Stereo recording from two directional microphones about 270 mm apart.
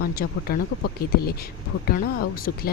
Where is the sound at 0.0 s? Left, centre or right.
Left.